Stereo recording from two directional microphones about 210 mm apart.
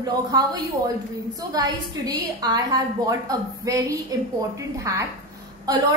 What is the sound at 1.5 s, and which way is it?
A woman's voice, 20° right (ahead or behind).